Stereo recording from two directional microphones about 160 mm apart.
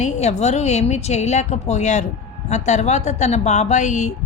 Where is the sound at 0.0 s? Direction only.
45° left (ahead or behind).